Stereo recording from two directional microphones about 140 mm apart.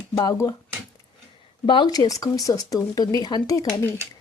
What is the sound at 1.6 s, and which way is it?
Speech, 35° left (ahead or behind).